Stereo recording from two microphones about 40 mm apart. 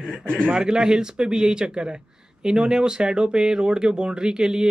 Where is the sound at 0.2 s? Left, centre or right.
Left.